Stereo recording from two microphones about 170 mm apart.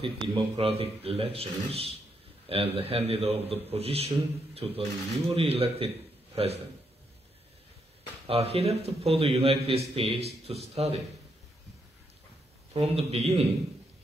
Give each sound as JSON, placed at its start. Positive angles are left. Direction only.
{"t": 0.0, "sound": "a man's voice", "side_deg": -30}
{"t": 8.3, "sound": "a man's voice", "side_deg": -35}
{"t": 12.7, "sound": "a man's voice", "side_deg": -35}